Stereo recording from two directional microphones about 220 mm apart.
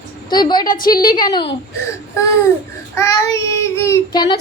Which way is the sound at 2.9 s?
15° left (ahead or behind).